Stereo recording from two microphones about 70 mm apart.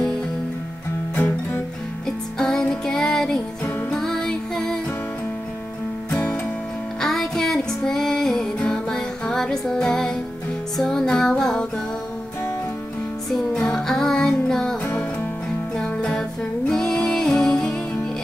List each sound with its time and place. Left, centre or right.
1.1 s music: left
2.0 s music: centre
7.0 s music: centre
13.3 s music: centre
15.8 s music: centre